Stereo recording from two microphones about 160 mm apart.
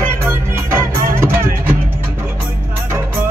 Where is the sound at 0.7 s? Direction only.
15° right (ahead or behind).